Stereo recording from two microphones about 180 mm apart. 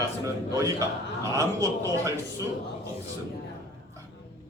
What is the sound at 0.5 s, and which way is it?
A man's voice, 20° right (ahead or behind).